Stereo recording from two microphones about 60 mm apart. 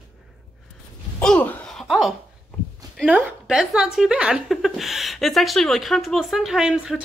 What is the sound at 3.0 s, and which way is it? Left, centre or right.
Speech, centre.